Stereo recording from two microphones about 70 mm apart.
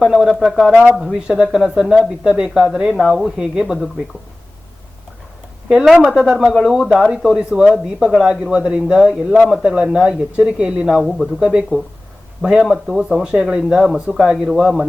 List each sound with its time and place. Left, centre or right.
0.0 s speech: centre
2.9 s speech: centre
5.6 s speech: centre